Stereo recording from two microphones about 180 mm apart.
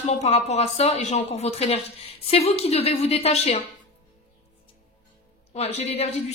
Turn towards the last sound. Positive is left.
turn(degrees=35)  # may be behind; listen again after turning